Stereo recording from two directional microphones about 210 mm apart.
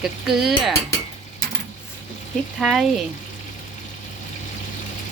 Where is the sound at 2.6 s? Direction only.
Centre (ahead or behind).